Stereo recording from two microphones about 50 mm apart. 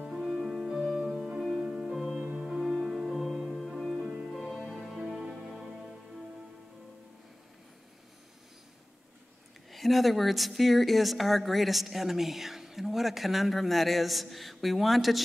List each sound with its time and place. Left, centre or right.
0.0 s music: centre
2.4 s music: centre
9.7 s speech: centre